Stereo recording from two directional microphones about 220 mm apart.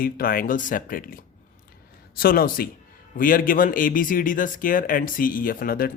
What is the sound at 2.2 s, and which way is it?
Speech, 40° left (ahead or behind).